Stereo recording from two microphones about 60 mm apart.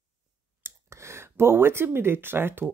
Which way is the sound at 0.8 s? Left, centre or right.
Right.